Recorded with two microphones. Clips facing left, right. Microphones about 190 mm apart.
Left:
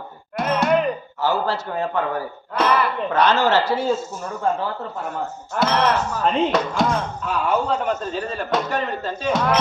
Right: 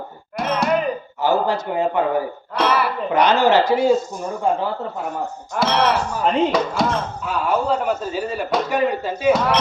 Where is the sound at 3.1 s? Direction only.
15° right (ahead or behind).